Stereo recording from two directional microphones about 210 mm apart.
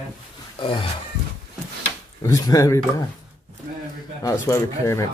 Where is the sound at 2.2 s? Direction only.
15° left (ahead or behind).